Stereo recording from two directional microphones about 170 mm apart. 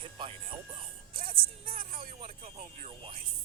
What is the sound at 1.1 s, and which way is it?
Speech, 55° right (ahead or behind).